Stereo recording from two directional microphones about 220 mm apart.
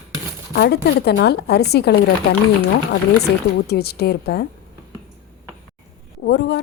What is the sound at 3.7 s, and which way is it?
Speech, 45° left (ahead or behind).